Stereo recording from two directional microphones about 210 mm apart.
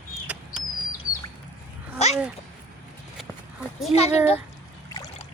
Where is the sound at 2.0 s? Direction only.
30° left (ahead or behind).